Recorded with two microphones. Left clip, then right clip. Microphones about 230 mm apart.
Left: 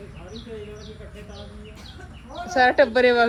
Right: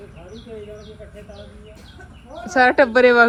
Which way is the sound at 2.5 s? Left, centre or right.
Centre.